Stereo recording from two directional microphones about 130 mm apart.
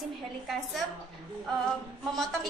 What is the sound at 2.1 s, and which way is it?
Speech, centre (ahead or behind).